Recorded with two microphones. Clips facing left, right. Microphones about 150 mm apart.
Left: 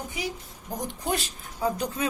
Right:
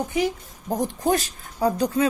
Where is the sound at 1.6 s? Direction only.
35° right (ahead or behind).